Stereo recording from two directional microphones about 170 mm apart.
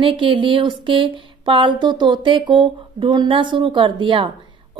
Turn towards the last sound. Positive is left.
turn(degrees=-30)  # may be behind; listen again after turning